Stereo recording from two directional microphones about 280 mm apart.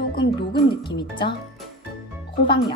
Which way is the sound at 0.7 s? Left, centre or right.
Centre.